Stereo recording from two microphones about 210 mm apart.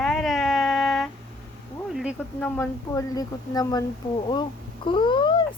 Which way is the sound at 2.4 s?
10° left (ahead or behind).